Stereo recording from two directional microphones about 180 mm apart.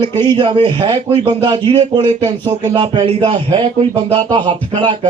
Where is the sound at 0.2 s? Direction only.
25° right (ahead or behind).